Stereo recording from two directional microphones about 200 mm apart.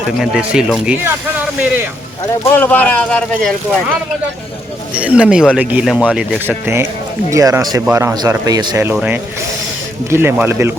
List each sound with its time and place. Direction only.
0.2 s a man's voice: centre (ahead or behind)
2.4 s speech: 10° left (ahead or behind)
4.9 s a man's voice: 5° right (ahead or behind)
10.1 s speech: 10° right (ahead or behind)